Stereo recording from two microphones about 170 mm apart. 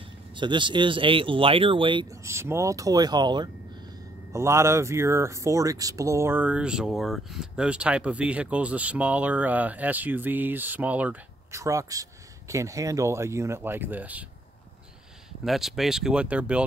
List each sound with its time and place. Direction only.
0.4 s speech: 30° right (ahead or behind)
2.2 s speech: 15° right (ahead or behind)
15.4 s speech: centre (ahead or behind)